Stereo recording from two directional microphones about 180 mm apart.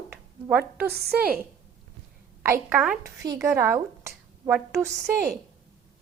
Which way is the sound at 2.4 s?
10° right (ahead or behind).